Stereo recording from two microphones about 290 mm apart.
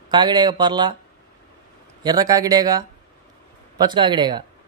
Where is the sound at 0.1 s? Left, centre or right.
Centre.